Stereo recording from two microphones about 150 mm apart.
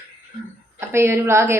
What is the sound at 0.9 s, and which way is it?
Speech, 15° right (ahead or behind).